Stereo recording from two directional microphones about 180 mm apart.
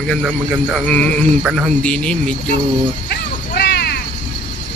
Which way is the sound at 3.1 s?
65° left (ahead or behind).